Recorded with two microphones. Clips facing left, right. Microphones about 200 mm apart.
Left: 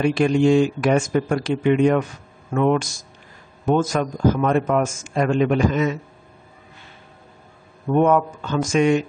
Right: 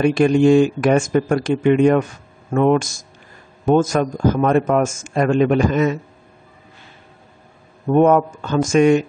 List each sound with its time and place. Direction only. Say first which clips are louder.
0.0 s a man's voice: right 3 dB; 50° right (ahead or behind)
7.9 s a man's voice: right 4 dB; 45° right (ahead or behind)